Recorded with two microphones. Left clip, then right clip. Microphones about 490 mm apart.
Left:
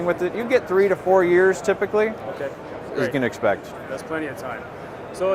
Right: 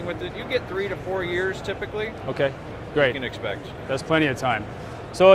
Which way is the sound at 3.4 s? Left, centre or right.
Left.